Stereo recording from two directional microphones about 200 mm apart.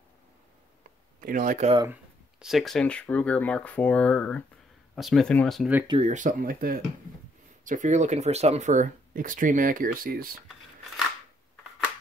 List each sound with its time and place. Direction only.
1.2 s speech: 40° right (ahead or behind)
2.3 s speech: centre (ahead or behind)
5.9 s speech: 30° right (ahead or behind)